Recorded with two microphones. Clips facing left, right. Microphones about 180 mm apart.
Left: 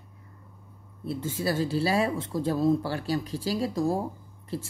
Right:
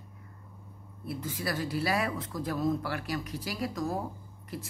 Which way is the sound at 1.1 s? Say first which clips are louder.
Left 5 dB; 25° left (ahead or behind).